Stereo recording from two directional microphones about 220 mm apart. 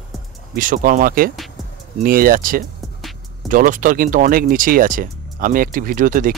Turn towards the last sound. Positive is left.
turn(degrees=-35)  # may be behind; listen again after turning